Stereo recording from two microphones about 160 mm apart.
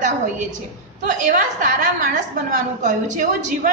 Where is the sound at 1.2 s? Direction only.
55° right (ahead or behind).